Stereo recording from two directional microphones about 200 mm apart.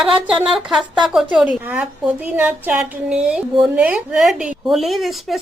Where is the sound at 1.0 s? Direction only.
Centre (ahead or behind).